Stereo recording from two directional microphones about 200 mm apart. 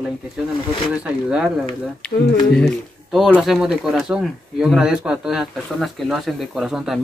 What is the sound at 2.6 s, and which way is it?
Speech, centre (ahead or behind).